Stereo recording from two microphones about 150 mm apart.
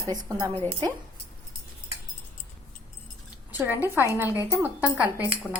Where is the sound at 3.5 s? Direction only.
10° right (ahead or behind).